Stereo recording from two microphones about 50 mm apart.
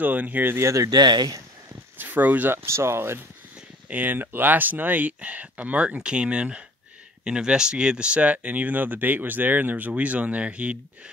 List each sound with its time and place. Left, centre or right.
0.0 s speech: right
2.0 s speech: right
2.5 s speech: right
3.9 s speech: right